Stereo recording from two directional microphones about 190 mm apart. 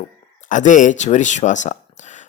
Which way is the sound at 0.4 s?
40° left (ahead or behind).